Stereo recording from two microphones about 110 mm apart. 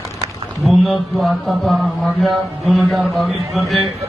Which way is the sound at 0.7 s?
Centre (ahead or behind).